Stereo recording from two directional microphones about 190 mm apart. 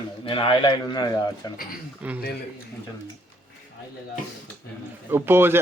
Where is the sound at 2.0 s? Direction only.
5° right (ahead or behind).